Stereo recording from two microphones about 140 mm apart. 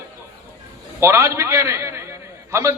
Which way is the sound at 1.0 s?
20° right (ahead or behind).